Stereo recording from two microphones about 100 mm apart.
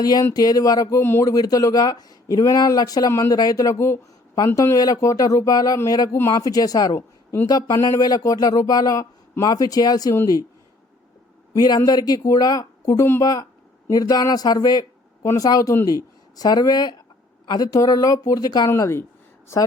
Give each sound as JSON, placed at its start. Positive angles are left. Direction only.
{"t": 0.0, "sound": "speech", "side_deg": 40}
{"t": 11.5, "sound": "speech", "side_deg": 40}
{"t": 13.9, "sound": "speech", "side_deg": 40}
{"t": 18.7, "sound": "speech", "side_deg": 25}